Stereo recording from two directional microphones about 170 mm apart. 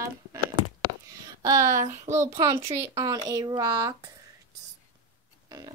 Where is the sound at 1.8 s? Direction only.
45° right (ahead or behind).